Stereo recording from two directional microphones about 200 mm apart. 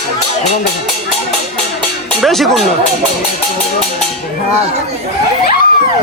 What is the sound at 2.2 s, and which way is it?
Speech, centre (ahead or behind).